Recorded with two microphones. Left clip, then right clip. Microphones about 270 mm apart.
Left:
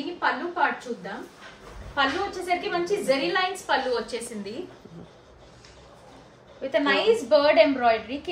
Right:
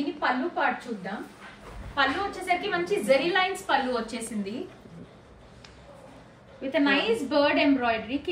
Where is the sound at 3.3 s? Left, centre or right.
Left.